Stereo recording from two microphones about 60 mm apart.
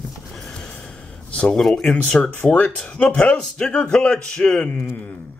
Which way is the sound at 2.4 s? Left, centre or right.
Centre.